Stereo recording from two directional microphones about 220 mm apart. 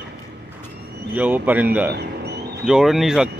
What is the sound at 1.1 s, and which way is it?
Speech, 5° right (ahead or behind).